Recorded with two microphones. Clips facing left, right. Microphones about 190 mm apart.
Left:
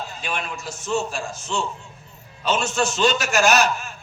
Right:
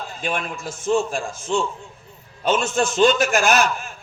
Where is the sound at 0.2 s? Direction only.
50° right (ahead or behind).